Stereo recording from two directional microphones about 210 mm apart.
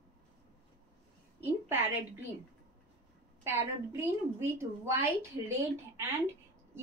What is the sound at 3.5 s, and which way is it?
A woman's voice, 10° right (ahead or behind).